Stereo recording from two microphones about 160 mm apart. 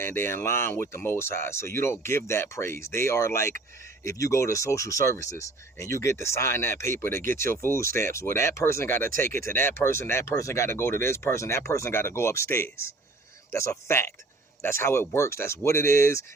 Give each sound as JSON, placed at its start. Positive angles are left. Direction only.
{"t": 0.0, "sound": "speech", "side_deg": 15}